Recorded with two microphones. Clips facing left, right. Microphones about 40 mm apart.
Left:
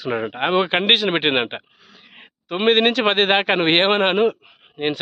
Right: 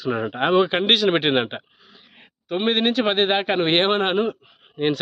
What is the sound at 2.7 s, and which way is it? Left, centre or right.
A man's voice, left.